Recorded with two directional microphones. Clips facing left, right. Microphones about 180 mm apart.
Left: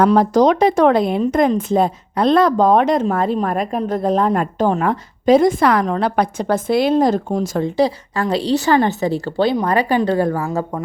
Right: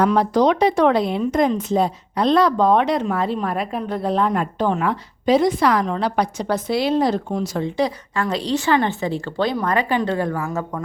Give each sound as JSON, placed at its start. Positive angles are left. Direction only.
{"t": 0.1, "sound": "a woman's voice", "side_deg": 45}
{"t": 7.8, "sound": "a woman's voice", "side_deg": 35}